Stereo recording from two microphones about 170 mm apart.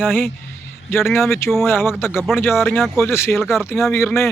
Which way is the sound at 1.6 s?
15° left (ahead or behind).